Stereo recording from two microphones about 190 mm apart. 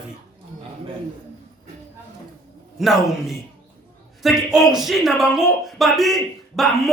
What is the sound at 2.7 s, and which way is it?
Speech, centre (ahead or behind).